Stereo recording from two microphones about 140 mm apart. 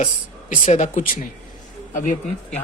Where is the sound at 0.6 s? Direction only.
55° left (ahead or behind).